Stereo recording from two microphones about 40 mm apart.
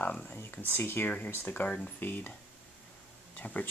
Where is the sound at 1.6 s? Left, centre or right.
Left.